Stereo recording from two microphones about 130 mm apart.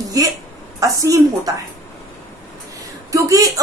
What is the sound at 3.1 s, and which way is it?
Speech, 25° right (ahead or behind).